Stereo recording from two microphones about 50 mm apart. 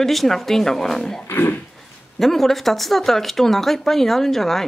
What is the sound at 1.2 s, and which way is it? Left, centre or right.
Speech, left.